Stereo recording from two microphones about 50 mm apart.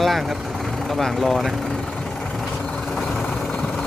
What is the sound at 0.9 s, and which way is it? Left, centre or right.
Speech, centre.